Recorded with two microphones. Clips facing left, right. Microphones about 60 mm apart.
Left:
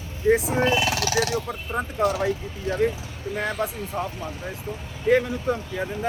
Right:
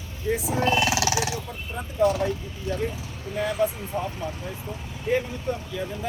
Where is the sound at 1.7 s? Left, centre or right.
Left.